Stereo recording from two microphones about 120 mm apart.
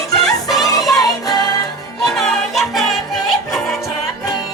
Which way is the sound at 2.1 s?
Centre (ahead or behind).